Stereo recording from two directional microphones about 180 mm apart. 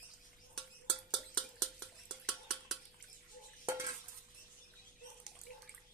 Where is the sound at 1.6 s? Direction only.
Centre (ahead or behind).